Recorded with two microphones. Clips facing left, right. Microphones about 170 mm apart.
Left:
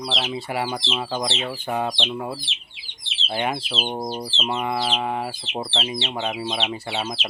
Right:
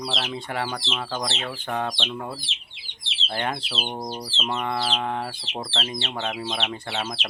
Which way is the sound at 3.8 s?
20° left (ahead or behind).